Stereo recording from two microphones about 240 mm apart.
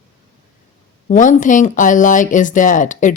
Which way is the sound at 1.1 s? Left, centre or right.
Left.